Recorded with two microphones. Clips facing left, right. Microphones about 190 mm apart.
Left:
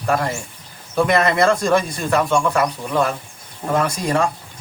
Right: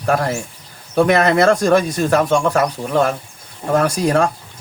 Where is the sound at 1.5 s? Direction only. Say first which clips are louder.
Right 3 dB; 40° right (ahead or behind).